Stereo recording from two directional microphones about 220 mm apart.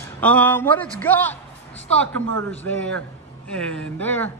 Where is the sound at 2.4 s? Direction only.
10° left (ahead or behind).